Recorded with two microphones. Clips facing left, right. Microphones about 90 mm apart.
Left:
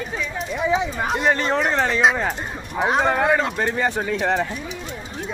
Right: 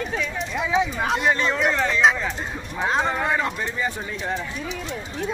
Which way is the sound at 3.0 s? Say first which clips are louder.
Left 4 dB; 65° left (ahead or behind).